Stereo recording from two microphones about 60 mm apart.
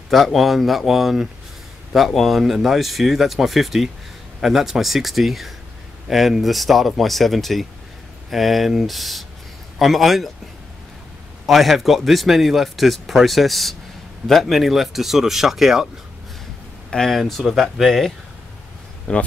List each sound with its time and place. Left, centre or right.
0.1 s speech: centre
11.4 s speech: centre
16.9 s speech: centre
19.1 s speech: centre